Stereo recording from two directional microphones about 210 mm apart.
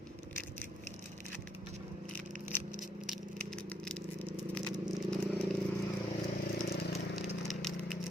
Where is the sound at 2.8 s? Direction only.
Centre (ahead or behind).